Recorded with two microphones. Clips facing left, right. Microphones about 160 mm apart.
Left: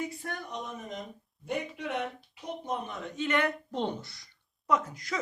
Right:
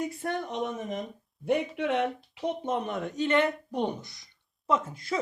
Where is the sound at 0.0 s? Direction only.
60° right (ahead or behind); by 3.0 s 80° right.